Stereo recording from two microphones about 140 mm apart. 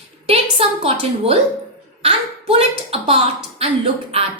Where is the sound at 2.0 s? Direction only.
45° right (ahead or behind).